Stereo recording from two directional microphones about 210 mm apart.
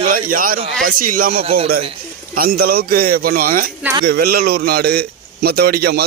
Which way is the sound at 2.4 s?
45° right (ahead or behind).